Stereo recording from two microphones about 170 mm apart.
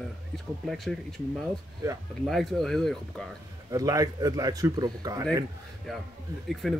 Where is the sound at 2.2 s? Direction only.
Centre (ahead or behind).